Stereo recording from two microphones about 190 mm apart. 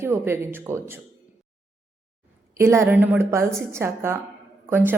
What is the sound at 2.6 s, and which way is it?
A woman's voice, 15° right (ahead or behind).